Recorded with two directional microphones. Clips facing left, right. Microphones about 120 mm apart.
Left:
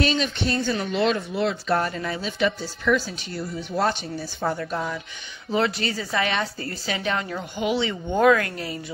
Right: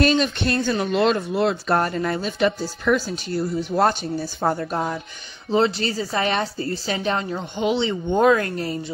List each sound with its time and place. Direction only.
0.0 s speech: 50° right (ahead or behind)
5.5 s a woman's voice: 30° right (ahead or behind)